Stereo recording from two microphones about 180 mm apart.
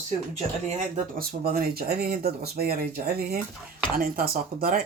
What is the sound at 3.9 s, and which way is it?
Speech, 55° right (ahead or behind).